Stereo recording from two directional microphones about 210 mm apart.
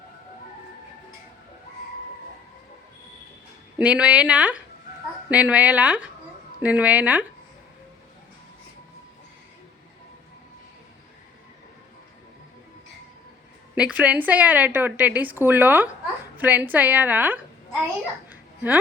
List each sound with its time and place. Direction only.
3.8 s a woman's voice: 5° right (ahead or behind)
13.7 s a woman's voice: 5° right (ahead or behind)
18.3 s babbling: 10° right (ahead or behind)